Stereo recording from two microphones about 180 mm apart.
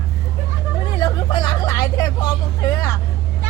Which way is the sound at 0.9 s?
25° left (ahead or behind).